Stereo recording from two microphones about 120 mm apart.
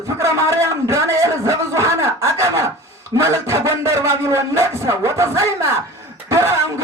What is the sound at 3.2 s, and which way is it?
Speech, 25° right (ahead or behind).